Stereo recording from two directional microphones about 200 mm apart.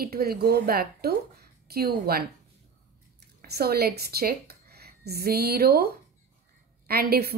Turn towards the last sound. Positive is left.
turn(degrees=-50)  # may be behind; listen again after turning